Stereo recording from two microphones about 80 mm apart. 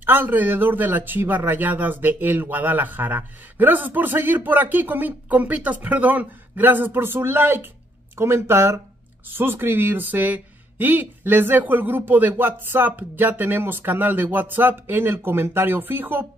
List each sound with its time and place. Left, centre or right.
0.0 s speech: right